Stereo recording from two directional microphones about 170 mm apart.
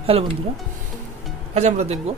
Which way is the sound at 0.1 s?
35° right (ahead or behind).